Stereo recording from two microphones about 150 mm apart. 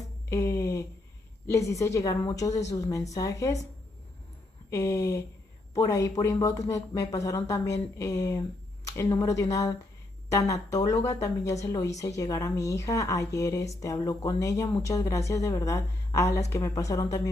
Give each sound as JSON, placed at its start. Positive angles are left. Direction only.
{"t": 0.3, "sound": "a woman's voice", "side_deg": 20}
{"t": 4.6, "sound": "a woman's voice", "side_deg": 20}